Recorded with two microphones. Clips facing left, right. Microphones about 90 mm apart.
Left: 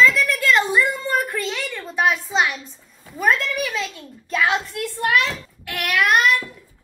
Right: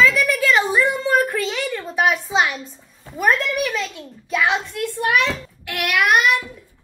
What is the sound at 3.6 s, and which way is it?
A child's voice, centre (ahead or behind).